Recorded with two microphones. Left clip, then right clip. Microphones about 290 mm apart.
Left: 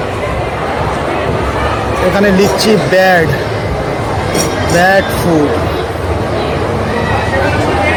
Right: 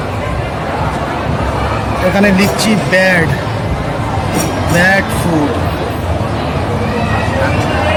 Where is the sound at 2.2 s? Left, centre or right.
Centre.